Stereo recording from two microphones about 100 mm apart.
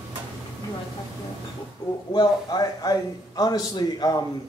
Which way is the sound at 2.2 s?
40° left (ahead or behind).